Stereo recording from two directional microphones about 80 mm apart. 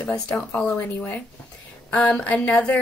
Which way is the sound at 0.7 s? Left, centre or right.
Left.